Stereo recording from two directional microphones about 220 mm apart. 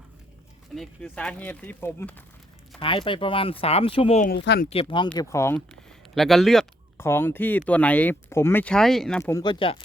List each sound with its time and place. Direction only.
0.8 s speech: 5° left (ahead or behind)
2.8 s speech: 25° left (ahead or behind)
4.3 s speech: 50° left (ahead or behind)
4.7 s speech: 25° left (ahead or behind)
5.1 s speech: 15° left (ahead or behind)
6.1 s speech: centre (ahead or behind)
9.3 s speech: 20° left (ahead or behind)